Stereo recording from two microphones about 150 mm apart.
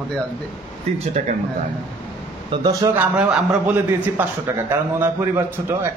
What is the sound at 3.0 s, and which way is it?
A man's voice, 5° right (ahead or behind).